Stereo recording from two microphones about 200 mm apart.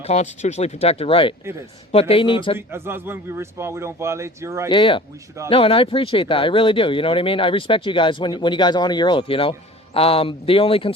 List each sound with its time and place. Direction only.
0.1 s speech: 35° left (ahead or behind)
2.6 s a man's voice: 10° right (ahead or behind)
4.7 s speech: 25° left (ahead or behind)